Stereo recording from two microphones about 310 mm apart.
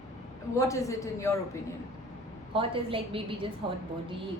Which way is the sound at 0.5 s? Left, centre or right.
Centre.